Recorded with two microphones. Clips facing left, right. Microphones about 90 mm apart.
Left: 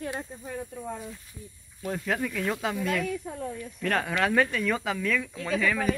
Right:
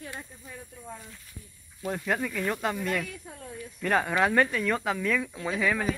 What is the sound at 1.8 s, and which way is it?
Speech, centre (ahead or behind).